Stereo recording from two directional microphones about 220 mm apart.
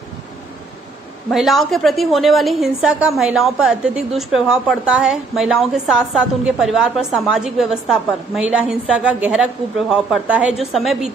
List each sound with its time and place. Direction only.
1.3 s a woman's voice: centre (ahead or behind)